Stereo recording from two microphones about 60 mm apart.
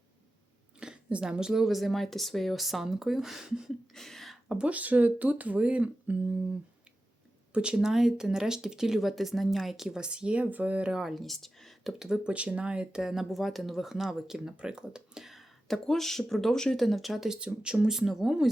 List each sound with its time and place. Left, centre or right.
0.8 s speech: centre
3.9 s speech: centre
4.4 s speech: centre
11.0 s speech: centre
17.4 s speech: centre